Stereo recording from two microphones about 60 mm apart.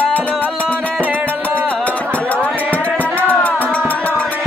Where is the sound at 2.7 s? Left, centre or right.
Left.